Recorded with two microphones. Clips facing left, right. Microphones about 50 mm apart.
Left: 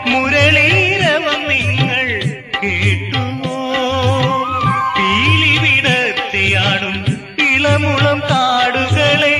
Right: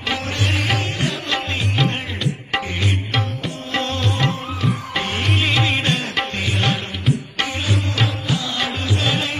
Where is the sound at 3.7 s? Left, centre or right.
Left.